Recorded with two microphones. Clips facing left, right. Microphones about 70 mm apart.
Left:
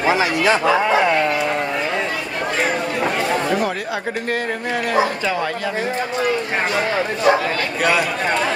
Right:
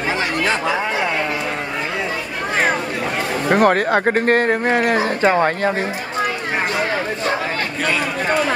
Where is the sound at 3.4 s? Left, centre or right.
Right.